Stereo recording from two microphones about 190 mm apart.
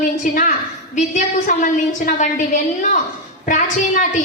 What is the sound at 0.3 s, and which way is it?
A woman's voice, 45° left (ahead or behind).